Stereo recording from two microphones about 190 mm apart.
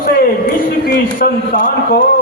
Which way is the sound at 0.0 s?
50° left (ahead or behind).